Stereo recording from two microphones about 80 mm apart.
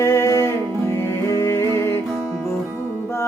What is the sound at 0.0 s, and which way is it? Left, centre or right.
Music, left.